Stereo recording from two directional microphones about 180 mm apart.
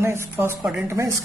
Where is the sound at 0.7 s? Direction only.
5° right (ahead or behind).